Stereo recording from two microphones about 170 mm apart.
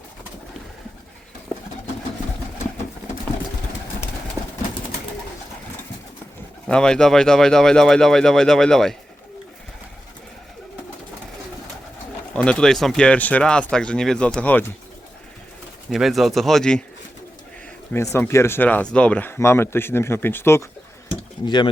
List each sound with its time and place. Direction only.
6.7 s speech: 5° left (ahead or behind)
12.3 s speech: 5° left (ahead or behind)
15.9 s speech: centre (ahead or behind)
17.9 s speech: 15° left (ahead or behind)
21.4 s speech: 25° left (ahead or behind)